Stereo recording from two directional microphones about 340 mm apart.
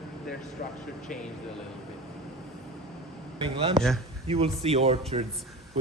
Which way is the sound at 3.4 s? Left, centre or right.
Centre.